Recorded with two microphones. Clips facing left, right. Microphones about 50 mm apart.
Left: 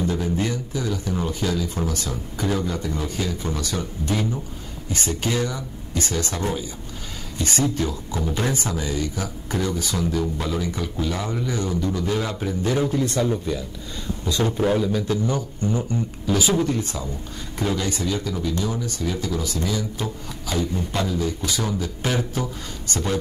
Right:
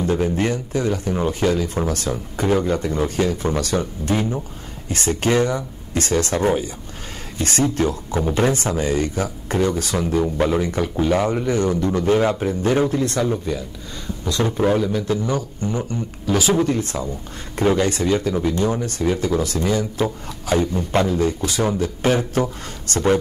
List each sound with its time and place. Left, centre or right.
0.0 s speech: right
4.1 s a man's voice: right
13.2 s a man's voice: right